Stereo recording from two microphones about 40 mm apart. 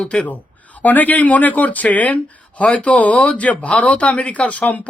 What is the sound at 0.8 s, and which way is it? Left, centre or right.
Speech, left.